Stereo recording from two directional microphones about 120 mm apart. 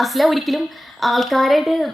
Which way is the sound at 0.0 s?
Centre (ahead or behind).